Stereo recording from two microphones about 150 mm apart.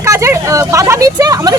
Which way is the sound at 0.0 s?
20° right (ahead or behind).